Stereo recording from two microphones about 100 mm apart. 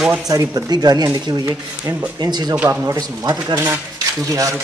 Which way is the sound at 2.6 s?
30° right (ahead or behind).